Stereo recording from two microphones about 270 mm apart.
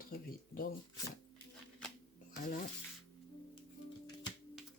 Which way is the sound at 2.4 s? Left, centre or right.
Left.